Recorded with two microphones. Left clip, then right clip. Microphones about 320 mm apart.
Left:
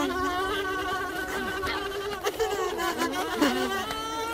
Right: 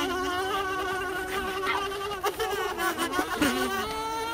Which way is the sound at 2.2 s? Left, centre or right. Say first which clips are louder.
Left 1 dB; centre.